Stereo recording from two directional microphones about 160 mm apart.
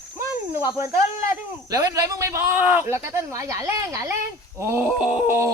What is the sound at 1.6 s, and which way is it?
Speech, 20° right (ahead or behind).